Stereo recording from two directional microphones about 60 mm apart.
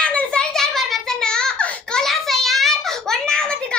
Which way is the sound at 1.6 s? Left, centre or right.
Left.